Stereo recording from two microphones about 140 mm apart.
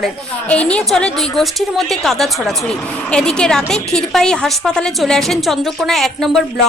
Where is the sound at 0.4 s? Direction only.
10° left (ahead or behind).